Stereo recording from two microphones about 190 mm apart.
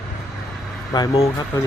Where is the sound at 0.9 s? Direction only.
20° left (ahead or behind).